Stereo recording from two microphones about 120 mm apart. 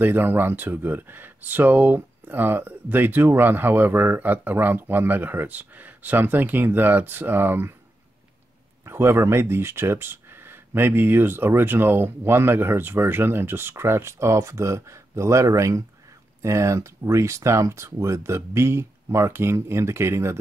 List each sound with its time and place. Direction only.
0.0 s speech: 15° right (ahead or behind)
8.8 s speech: 20° right (ahead or behind)